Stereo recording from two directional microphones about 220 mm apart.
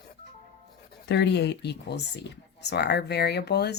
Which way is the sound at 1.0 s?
50° left (ahead or behind).